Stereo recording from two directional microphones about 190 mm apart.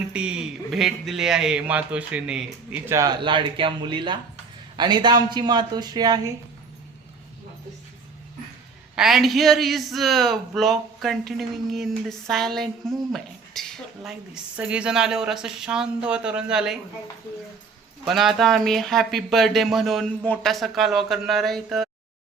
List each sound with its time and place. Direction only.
0.1 s a man's voice: 5° right (ahead or behind); by 6.3 s 20° right (ahead or behind)
9.0 s a man's voice: centre (ahead or behind)
18.0 s a man's voice: centre (ahead or behind)